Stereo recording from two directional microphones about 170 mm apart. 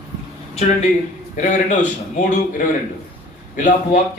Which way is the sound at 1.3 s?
45° left (ahead or behind).